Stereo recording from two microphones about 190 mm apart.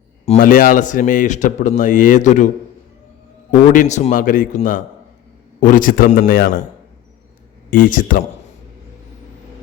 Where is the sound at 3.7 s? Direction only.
40° left (ahead or behind).